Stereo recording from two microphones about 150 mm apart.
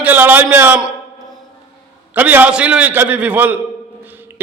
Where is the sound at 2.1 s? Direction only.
10° right (ahead or behind).